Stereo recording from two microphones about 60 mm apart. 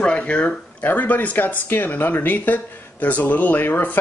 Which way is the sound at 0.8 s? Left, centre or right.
Left.